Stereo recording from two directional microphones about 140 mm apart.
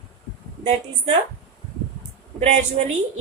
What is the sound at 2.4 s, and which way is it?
Speech, 50° right (ahead or behind).